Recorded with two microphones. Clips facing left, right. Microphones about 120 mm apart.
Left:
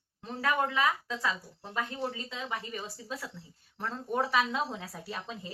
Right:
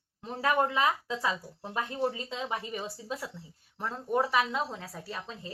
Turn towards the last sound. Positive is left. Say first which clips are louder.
# even
turn(degrees=5)  # may be behind; listen again after turning